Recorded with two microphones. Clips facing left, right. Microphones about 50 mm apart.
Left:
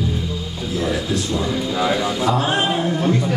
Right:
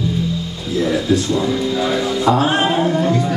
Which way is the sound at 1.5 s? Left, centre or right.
Centre.